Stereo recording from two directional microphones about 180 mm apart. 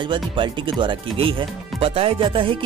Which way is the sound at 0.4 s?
25° right (ahead or behind).